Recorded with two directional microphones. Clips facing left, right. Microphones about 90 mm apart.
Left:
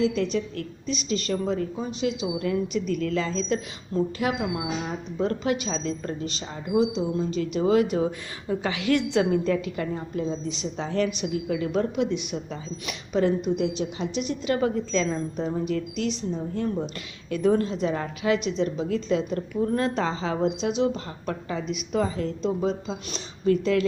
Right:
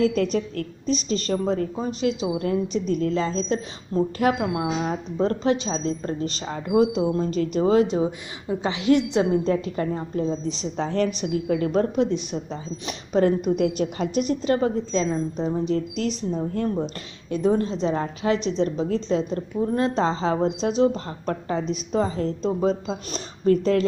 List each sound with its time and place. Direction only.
0.0 s speech: 45° right (ahead or behind)
4.2 s speech: 40° right (ahead or behind)
14.9 s a woman's voice: 20° right (ahead or behind); by 16.4 s 40° right (ahead or behind)
17.2 s speech: 25° right (ahead or behind); by 23.8 s 40° right (ahead or behind)